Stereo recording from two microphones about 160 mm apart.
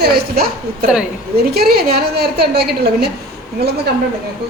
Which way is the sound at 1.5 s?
75° right (ahead or behind).